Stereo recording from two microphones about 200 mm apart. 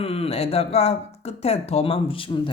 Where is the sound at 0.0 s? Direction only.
30° left (ahead or behind).